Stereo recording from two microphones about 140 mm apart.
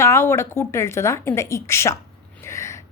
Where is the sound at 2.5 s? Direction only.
20° left (ahead or behind).